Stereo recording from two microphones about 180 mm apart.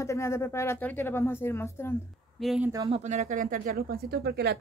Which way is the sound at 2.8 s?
35° right (ahead or behind).